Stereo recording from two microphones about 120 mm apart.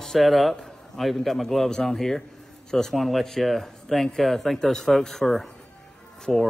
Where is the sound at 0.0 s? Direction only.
Centre (ahead or behind).